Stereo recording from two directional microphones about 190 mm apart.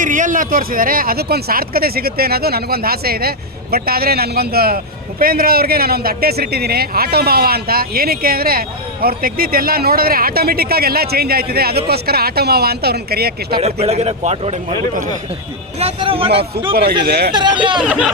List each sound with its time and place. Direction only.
0.0 s a man's voice: 45° right (ahead or behind)
13.6 s a man's voice: 35° right (ahead or behind)
15.8 s a man's voice: 30° right (ahead or behind)
16.7 s speech: 55° right (ahead or behind)
17.3 s a man's voice: 25° right (ahead or behind)
17.7 s speech: 5° right (ahead or behind)